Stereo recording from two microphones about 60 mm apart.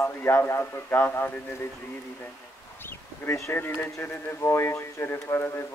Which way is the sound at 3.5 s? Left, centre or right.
Left.